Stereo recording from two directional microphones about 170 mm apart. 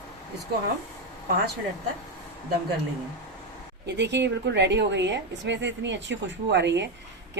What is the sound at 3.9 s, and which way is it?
A woman's voice, 90° right.